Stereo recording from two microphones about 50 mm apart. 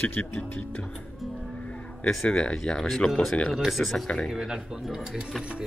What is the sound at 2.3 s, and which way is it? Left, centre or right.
Speech, centre.